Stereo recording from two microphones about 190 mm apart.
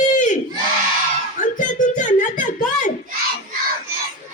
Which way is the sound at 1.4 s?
40° left (ahead or behind).